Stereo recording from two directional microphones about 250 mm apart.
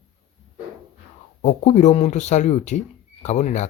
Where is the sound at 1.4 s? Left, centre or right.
Left.